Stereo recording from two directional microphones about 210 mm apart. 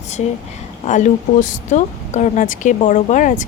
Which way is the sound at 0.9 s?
35° left (ahead or behind).